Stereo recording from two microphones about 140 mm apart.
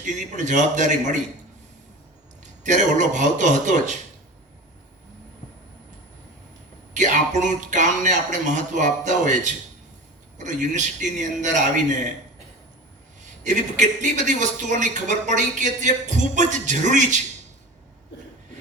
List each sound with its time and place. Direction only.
0.0 s a man's voice: 60° right (ahead or behind)
2.4 s a man's voice: 60° right (ahead or behind)
6.9 s a man's voice: 60° right (ahead or behind)
13.4 s a man's voice: 60° right (ahead or behind)